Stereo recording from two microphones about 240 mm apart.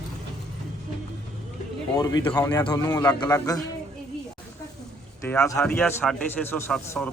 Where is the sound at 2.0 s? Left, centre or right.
Centre.